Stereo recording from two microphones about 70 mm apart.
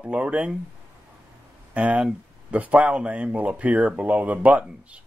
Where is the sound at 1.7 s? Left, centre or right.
Centre.